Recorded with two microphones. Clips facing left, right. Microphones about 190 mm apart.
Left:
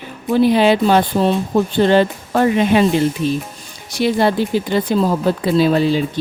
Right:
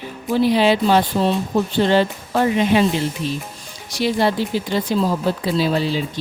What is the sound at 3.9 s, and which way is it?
Speech, 55° left (ahead or behind).